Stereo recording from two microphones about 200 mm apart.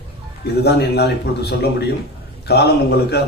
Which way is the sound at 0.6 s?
55° left (ahead or behind).